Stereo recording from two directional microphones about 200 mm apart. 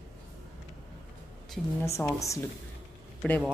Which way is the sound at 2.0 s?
15° left (ahead or behind).